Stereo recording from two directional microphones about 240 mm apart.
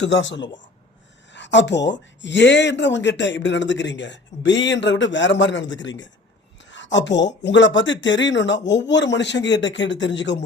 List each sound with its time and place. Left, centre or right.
0.0 s speech: left